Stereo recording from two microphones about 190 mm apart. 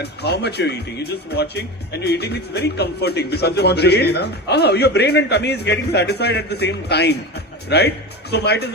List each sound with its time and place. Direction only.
0.0 s speech: 60° left (ahead or behind)